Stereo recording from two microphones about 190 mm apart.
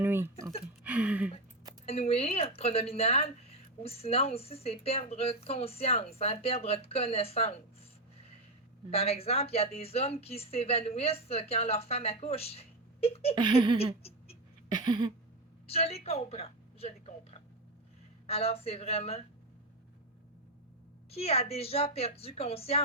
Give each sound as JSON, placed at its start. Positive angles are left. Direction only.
{"t": 0.0, "sound": "speech", "side_deg": -10}
{"t": 0.9, "sound": "a sound", "side_deg": -5}
{"t": 1.9, "sound": "a woman's voice", "side_deg": 30}
{"t": 8.9, "sound": "a woman's voice", "side_deg": 30}
{"t": 13.3, "sound": "laughter", "side_deg": -25}
{"t": 14.7, "sound": "a sound", "side_deg": -25}
{"t": 15.6, "sound": "a woman's voice", "side_deg": 30}
{"t": 21.1, "sound": "a woman's voice", "side_deg": 30}